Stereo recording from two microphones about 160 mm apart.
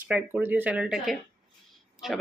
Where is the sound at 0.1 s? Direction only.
10° right (ahead or behind).